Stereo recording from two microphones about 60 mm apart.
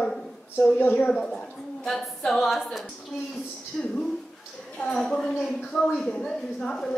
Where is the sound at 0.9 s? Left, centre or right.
Centre.